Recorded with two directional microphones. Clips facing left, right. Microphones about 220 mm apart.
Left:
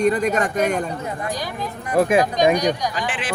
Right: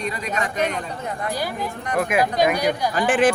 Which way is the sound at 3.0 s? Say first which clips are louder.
Right 11 dB; 45° right (ahead or behind).